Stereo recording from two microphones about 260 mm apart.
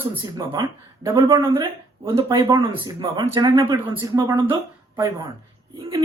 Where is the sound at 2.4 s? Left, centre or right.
Centre.